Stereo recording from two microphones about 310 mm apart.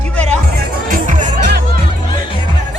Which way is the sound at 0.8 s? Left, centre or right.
Right.